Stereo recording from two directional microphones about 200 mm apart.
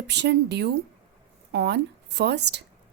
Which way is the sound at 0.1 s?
60° right (ahead or behind).